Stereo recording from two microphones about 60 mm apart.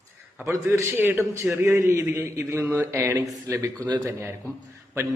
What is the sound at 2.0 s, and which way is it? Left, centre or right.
A man's voice, right.